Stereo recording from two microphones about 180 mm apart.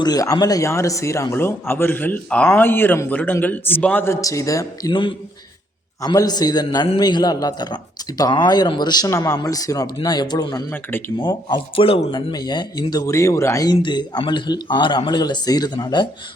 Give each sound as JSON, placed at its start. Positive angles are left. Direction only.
{"t": 0.0, "sound": "a man's voice", "side_deg": 20}